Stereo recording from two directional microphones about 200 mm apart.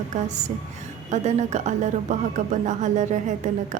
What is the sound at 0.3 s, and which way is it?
A woman's voice, 35° right (ahead or behind).